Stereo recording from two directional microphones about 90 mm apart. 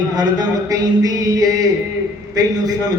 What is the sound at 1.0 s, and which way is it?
Music, 45° right (ahead or behind).